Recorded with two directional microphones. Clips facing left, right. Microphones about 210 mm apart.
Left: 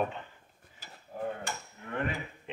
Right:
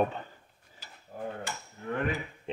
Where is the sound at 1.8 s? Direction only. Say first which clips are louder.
Right 8 dB; 35° right (ahead or behind).